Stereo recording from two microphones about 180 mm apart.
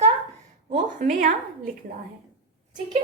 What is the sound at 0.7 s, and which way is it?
Speech, 45° right (ahead or behind).